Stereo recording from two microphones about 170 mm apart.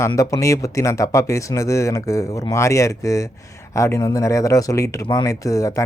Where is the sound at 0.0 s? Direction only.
20° left (ahead or behind).